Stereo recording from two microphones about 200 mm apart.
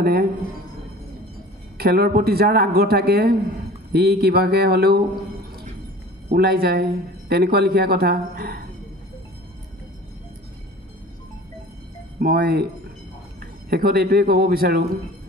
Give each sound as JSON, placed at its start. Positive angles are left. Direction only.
{"t": 0.0, "sound": "speech", "side_deg": -50}
{"t": 1.8, "sound": "speech", "side_deg": -50}
{"t": 6.2, "sound": "speech", "side_deg": -50}
{"t": 12.2, "sound": "speech", "side_deg": -50}